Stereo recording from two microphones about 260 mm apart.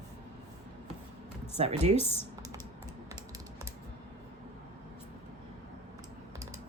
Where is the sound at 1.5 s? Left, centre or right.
Right.